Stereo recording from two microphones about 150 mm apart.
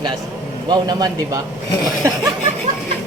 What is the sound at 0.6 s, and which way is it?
Speech, 25° right (ahead or behind).